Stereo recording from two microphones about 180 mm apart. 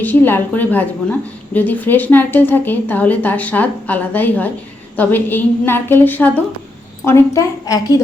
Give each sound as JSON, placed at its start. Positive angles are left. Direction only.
{"t": 0.0, "sound": "a woman's voice", "side_deg": 10}